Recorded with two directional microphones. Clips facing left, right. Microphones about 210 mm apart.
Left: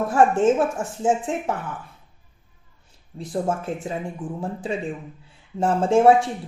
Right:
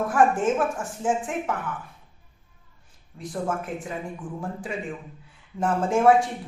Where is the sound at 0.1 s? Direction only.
25° left (ahead or behind).